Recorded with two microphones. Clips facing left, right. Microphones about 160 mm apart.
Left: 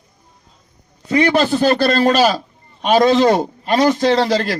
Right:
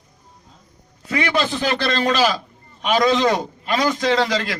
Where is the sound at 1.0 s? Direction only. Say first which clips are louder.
Left 6 dB; 30° left (ahead or behind).